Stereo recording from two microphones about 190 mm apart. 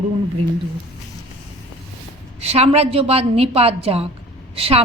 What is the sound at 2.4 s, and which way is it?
A woman's voice, 35° right (ahead or behind).